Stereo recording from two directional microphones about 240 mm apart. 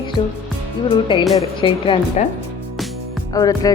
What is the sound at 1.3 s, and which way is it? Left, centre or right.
Speech, left.